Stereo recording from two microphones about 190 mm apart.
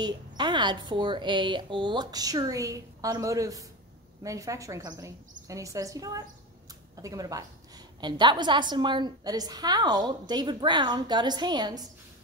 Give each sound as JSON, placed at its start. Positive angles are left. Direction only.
{"t": 0.0, "sound": "a woman's voice", "side_deg": -25}